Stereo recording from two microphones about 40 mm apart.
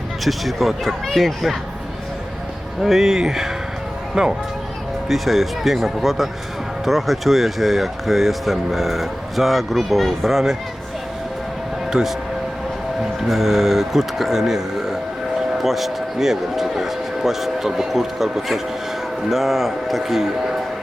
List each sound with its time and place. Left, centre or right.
0.3 s speech: centre
2.8 s speech: centre
5.0 s speech: centre
11.9 s speech: centre
13.2 s speech: centre